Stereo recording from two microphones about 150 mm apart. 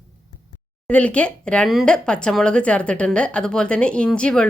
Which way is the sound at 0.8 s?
10° left (ahead or behind).